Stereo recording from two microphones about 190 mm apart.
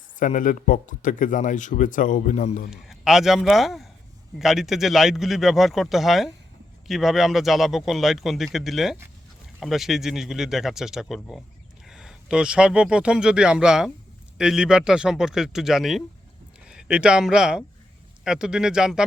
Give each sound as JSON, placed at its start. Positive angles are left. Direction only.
{"t": 0.2, "sound": "speech", "side_deg": 45}
{"t": 2.6, "sound": "speech", "side_deg": 0}